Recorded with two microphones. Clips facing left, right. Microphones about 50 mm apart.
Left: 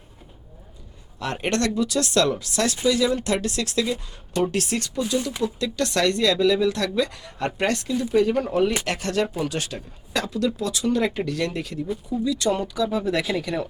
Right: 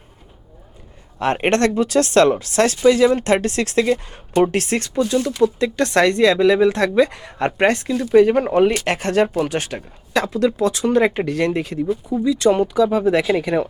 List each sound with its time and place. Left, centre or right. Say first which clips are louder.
1.2 s speech: right 7 dB; right